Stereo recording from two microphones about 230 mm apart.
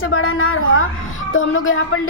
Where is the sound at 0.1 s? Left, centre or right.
Left.